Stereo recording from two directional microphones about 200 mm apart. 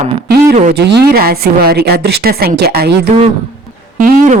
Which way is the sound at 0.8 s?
55° right (ahead or behind).